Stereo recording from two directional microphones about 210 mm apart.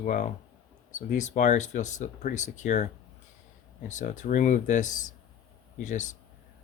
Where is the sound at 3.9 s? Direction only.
35° left (ahead or behind).